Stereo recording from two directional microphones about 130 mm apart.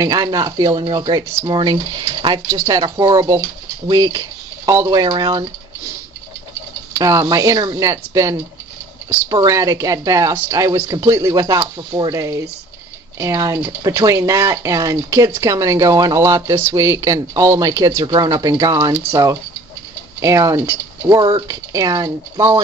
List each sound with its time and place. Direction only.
0.0 s speech: 30° right (ahead or behind)
2.4 s speech: 25° right (ahead or behind)
6.9 s speech: 25° right (ahead or behind)
20.2 s speech: 25° right (ahead or behind)
21.5 s speech: 25° right (ahead or behind)